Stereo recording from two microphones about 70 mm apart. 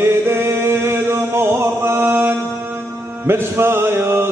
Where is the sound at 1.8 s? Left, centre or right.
Right.